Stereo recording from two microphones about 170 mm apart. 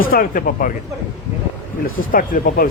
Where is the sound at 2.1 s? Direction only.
55° left (ahead or behind).